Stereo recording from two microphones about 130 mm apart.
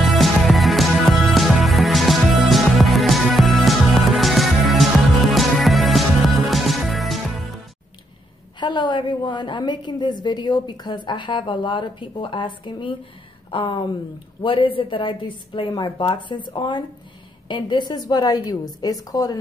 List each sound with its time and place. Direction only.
0.0 s music: centre (ahead or behind)
8.5 s a woman's voice: 35° left (ahead or behind)